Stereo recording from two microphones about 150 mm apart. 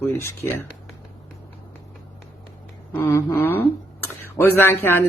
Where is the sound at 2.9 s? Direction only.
15° left (ahead or behind).